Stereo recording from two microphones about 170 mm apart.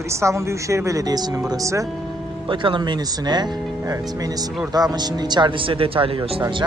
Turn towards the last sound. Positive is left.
turn(degrees=-30)  # may be behind; listen again after turning